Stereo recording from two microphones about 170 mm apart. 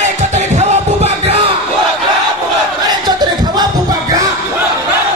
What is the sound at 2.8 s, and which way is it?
Crowd, 25° right (ahead or behind).